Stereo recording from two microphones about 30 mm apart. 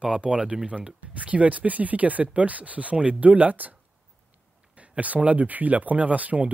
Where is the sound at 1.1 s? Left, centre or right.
Right.